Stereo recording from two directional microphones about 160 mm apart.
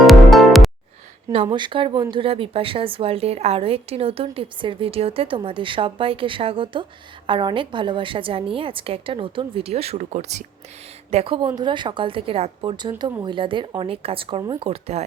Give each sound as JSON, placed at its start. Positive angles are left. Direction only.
{"t": 0.1, "sound": "music", "side_deg": 0}
{"t": 1.3, "sound": "speech", "side_deg": -35}